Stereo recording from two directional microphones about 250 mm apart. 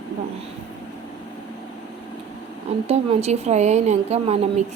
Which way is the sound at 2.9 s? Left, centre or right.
Right.